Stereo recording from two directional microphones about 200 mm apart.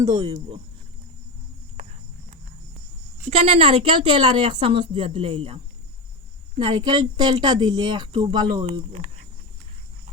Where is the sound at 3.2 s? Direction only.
30° right (ahead or behind).